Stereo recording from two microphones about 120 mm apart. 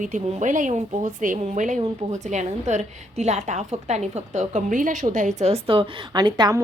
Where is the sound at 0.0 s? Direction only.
90° right.